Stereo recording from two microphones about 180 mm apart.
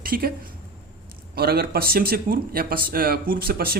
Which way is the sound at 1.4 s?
60° right (ahead or behind).